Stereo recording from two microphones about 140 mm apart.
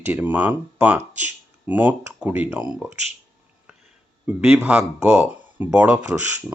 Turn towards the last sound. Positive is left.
turn(degrees=-10)  # may be behind; listen again after turning